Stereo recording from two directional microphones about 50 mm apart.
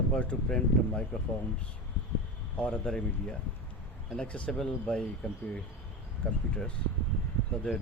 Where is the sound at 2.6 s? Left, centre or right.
Left.